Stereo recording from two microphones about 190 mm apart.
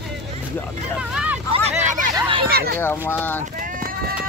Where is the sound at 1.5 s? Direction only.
35° right (ahead or behind).